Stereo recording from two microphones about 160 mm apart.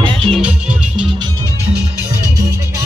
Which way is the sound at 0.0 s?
35° right (ahead or behind).